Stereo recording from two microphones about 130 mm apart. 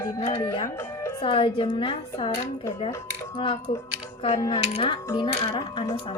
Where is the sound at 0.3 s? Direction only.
25° left (ahead or behind).